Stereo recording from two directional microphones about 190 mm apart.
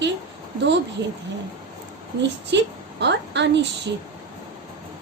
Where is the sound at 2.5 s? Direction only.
65° right (ahead or behind).